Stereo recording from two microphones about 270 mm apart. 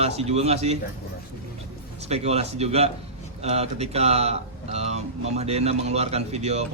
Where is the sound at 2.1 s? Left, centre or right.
Right.